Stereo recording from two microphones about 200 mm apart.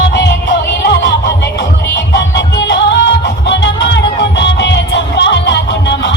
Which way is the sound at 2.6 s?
60° left (ahead or behind).